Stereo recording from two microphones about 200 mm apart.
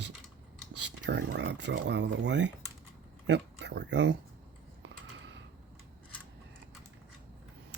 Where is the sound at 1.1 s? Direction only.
60° right (ahead or behind).